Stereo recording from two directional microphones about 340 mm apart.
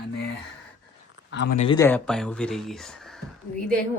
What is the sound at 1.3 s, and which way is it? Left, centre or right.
Speech, left.